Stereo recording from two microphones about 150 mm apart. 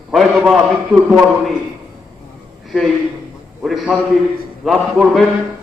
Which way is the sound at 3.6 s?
Centre (ahead or behind).